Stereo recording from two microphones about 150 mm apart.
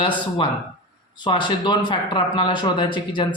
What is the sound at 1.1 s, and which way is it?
Speech, 30° left (ahead or behind).